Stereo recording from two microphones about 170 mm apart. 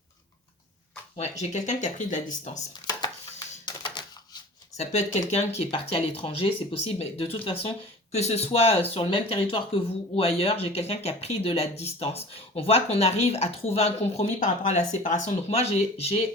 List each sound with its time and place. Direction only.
1.1 s speech: 40° left (ahead or behind)
2.8 s a sound: 25° left (ahead or behind)
4.8 s speech: 40° left (ahead or behind)